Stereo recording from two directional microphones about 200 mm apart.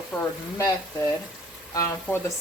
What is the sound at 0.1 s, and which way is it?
Frying, centre (ahead or behind).